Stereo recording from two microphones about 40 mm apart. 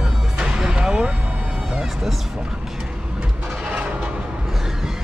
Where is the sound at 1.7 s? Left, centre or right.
Centre.